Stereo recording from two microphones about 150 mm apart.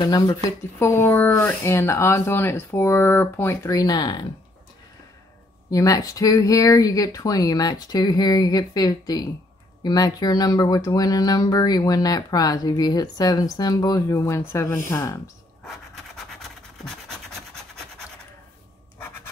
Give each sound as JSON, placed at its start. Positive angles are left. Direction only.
{"t": 0.0, "sound": "speech", "side_deg": 25}
{"t": 5.7, "sound": "speech", "side_deg": 25}